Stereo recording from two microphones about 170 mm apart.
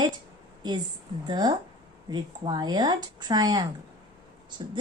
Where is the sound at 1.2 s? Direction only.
25° right (ahead or behind).